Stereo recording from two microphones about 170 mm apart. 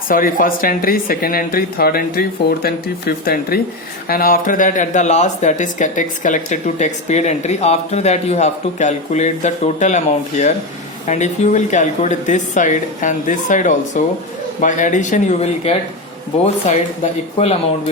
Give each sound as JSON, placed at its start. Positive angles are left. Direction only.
{"t": 0.1, "sound": "speech", "side_deg": 55}